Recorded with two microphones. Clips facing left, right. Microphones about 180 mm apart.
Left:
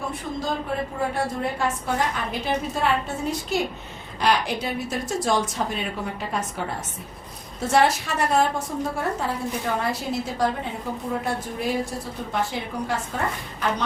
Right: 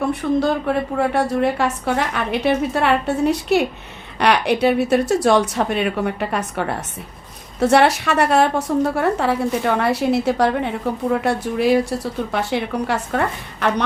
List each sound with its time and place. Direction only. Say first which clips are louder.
0.1 s a woman's voice: right 10 dB; 70° right (ahead or behind)